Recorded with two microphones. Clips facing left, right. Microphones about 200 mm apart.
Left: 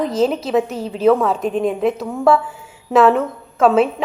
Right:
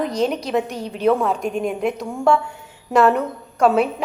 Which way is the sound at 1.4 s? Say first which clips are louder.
Left 4 dB; 30° left (ahead or behind).